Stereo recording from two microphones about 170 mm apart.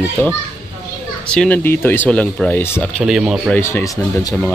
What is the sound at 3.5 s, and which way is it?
Speech, 15° left (ahead or behind).